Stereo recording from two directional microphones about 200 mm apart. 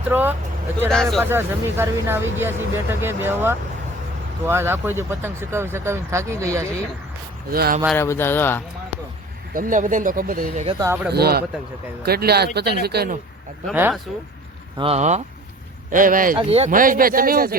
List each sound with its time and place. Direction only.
0.1 s speech: 10° right (ahead or behind)
0.9 s speech: centre (ahead or behind)
1.2 s speech: 10° right (ahead or behind)
7.5 s speech: 50° right (ahead or behind)
7.9 s speech: 10° left (ahead or behind)
9.6 s speech: 40° right (ahead or behind)
10.7 s speech: 20° right (ahead or behind)
11.1 s speech: 50° right (ahead or behind)
13.7 s speech: 10° right (ahead or behind)
14.8 s speech: 30° right (ahead or behind)
16.4 s speech: 30° right (ahead or behind); by 17.5 s 45° right (ahead or behind)